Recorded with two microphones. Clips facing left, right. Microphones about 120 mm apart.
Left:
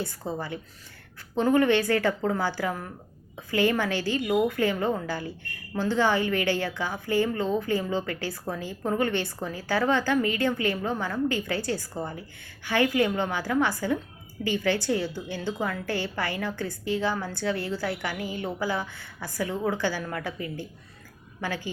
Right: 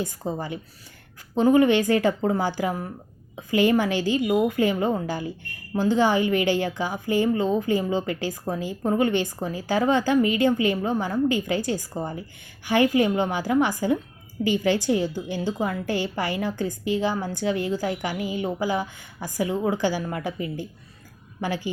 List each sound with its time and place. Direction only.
0.0 s a woman's voice: 15° right (ahead or behind)